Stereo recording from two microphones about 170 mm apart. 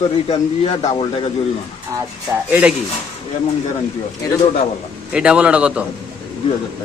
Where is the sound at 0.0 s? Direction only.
35° left (ahead or behind).